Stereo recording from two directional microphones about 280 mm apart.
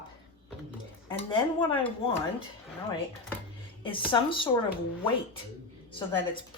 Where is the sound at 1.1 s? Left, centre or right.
Centre.